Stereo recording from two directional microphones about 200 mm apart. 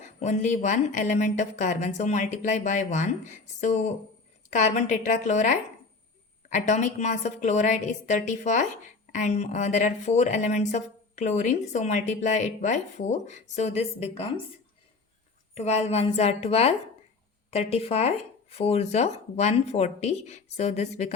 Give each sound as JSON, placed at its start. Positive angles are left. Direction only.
{"t": 0.0, "sound": "speech", "side_deg": 35}
{"t": 15.5, "sound": "speech", "side_deg": 35}